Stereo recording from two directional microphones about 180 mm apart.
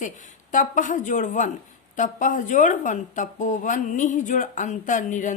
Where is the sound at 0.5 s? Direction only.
45° left (ahead or behind).